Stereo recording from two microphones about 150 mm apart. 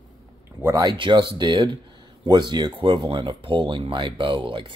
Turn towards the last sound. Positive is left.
turn(degrees=-35)  # may be behind; listen again after turning